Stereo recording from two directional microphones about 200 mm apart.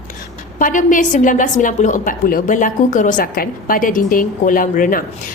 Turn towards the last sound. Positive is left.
turn(degrees=45)  # may be behind; listen again after turning